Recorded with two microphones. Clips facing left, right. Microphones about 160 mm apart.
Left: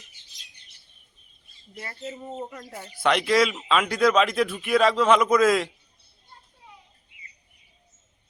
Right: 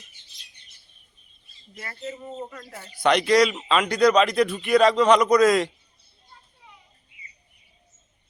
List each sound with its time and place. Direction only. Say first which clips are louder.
1.7 s speech: right 1 dB; 20° left (ahead or behind)
3.0 s speech: right 3 dB; centre (ahead or behind)